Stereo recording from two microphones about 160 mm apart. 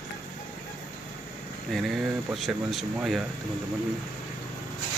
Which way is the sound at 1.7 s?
Centre (ahead or behind).